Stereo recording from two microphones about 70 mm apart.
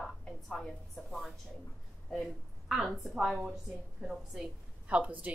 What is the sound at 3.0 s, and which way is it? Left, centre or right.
A woman's voice, centre.